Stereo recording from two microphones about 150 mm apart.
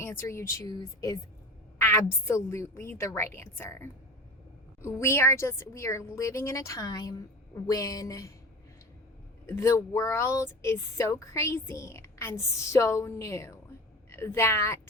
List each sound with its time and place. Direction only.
0.0 s a woman's voice: 15° left (ahead or behind)
9.5 s a woman's voice: 20° left (ahead or behind)